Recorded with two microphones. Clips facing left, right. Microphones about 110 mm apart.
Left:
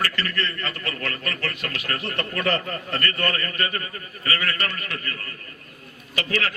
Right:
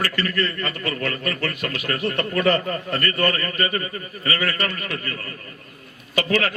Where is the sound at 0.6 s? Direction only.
20° right (ahead or behind).